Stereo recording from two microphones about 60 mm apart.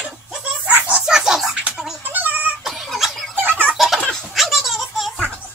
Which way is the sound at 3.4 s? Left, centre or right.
Right.